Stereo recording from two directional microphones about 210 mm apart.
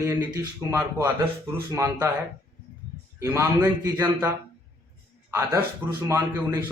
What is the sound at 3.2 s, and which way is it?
A man's voice, 10° right (ahead or behind).